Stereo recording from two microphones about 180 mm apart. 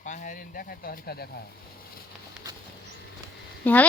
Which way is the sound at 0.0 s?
45° left (ahead or behind).